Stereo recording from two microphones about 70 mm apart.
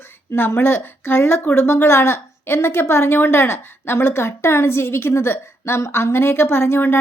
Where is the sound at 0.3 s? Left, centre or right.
Left.